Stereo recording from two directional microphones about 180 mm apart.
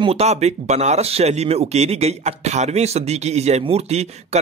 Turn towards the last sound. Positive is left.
turn(degrees=-35)  # may be behind; listen again after turning